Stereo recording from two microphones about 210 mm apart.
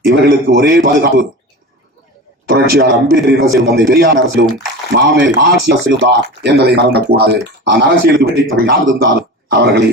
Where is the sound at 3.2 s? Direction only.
50° right (ahead or behind).